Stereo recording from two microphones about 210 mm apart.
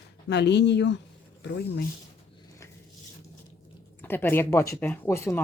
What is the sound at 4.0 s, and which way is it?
Speech, 10° left (ahead or behind).